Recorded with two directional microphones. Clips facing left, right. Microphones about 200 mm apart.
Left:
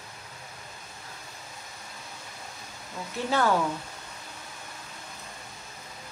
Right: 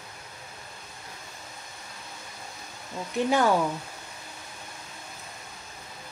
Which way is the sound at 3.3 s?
15° right (ahead or behind).